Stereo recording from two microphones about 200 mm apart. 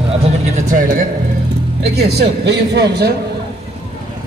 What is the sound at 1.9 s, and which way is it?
Speech, 55° right (ahead or behind).